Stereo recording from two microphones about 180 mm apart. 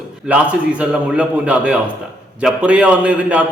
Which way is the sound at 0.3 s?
5° right (ahead or behind).